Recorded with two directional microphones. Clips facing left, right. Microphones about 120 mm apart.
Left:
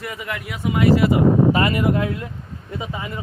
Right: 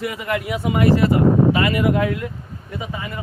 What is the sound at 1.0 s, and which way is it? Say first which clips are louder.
Speech: even; 15° left (ahead or behind).